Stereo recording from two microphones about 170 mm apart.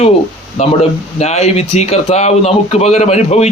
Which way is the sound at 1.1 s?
40° left (ahead or behind).